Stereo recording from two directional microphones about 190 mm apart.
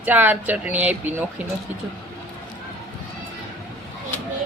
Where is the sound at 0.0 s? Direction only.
10° right (ahead or behind).